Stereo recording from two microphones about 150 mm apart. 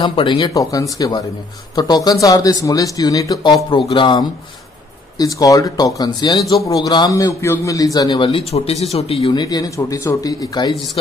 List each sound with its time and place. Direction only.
0.0 s a man's voice: 30° left (ahead or behind)